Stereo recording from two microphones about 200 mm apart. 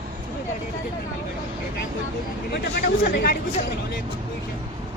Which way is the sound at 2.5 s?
50° left (ahead or behind).